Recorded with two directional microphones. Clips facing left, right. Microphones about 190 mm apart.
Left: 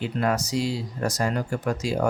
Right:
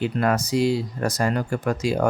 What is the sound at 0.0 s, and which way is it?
Speech, 60° right (ahead or behind).